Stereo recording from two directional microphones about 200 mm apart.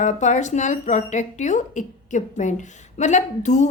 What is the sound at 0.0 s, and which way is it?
A woman's voice, 35° left (ahead or behind).